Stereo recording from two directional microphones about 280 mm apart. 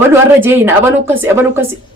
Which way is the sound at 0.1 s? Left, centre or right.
Centre.